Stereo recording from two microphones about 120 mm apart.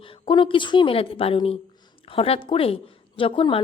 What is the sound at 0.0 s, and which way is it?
Speech, 45° left (ahead or behind).